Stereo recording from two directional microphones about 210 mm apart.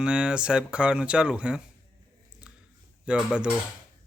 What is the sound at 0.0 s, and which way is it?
Speech, 5° right (ahead or behind).